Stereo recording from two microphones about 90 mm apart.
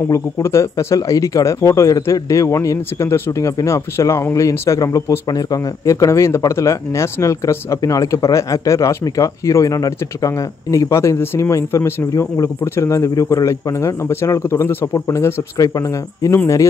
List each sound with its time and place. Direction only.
0.1 s speech: 30° left (ahead or behind)
15.5 s speech: 40° left (ahead or behind)